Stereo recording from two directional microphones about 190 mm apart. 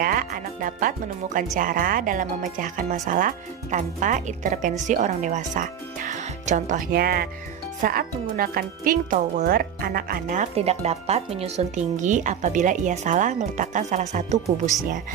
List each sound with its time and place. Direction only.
0.0 s speech: 45° right (ahead or behind)